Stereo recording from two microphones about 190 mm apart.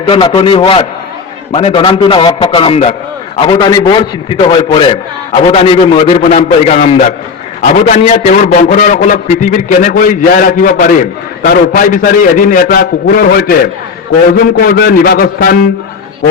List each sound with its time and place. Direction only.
0.1 s a man's voice: 25° left (ahead or behind); by 13.6 s 50° left (ahead or behind)
14.6 s a man's voice: 55° left (ahead or behind)